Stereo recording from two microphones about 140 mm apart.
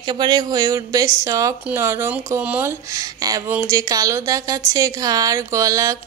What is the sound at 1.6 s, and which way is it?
Speech, 20° right (ahead or behind).